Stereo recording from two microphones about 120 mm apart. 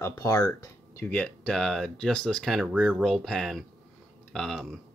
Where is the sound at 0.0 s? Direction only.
30° left (ahead or behind).